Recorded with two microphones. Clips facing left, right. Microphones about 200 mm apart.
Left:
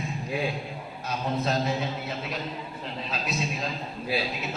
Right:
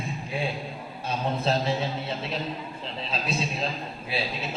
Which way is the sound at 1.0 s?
30° right (ahead or behind).